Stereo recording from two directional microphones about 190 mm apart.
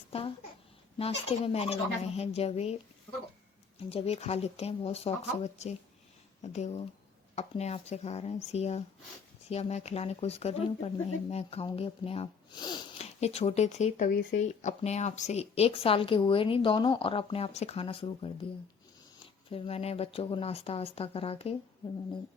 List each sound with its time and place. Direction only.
0.1 s a child's voice: 30° left (ahead or behind)
3.8 s speech: 30° left (ahead or behind)
13.1 s speech: 35° left (ahead or behind)
19.5 s speech: 30° left (ahead or behind)